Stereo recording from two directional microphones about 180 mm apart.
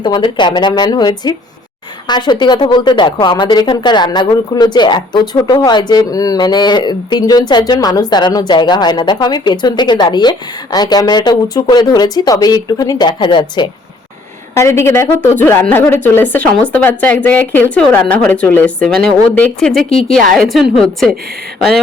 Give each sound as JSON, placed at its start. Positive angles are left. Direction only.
{"t": 0.0, "sound": "a woman's voice", "side_deg": 25}
{"t": 14.5, "sound": "a woman's voice", "side_deg": 15}